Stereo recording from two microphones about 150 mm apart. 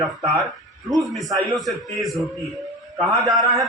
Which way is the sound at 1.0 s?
Centre (ahead or behind).